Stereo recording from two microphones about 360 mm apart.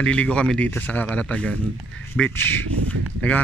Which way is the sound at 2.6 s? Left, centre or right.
Right.